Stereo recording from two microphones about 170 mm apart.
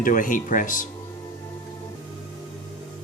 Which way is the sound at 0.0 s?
50° left (ahead or behind).